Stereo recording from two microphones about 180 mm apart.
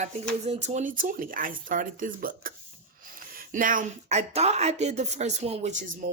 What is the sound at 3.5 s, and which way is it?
Speech, 50° right (ahead or behind).